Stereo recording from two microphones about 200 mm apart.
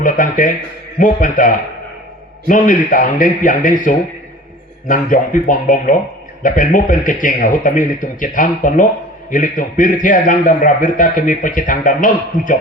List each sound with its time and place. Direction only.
0.0 s a man's voice: 40° left (ahead or behind)
2.5 s a man's voice: 40° left (ahead or behind)